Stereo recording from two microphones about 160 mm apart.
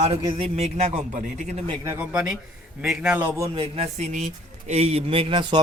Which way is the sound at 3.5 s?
35° right (ahead or behind).